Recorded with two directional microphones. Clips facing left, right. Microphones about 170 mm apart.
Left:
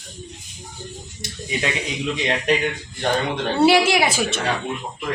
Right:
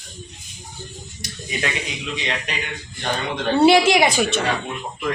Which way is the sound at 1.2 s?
25° left (ahead or behind).